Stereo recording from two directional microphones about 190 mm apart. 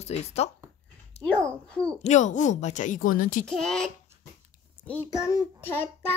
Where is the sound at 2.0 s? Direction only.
40° left (ahead or behind).